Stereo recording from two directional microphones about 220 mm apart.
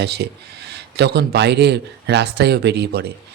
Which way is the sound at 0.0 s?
50° right (ahead or behind).